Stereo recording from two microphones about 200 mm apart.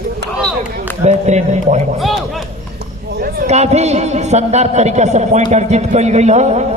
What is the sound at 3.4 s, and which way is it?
A man's voice, 35° right (ahead or behind).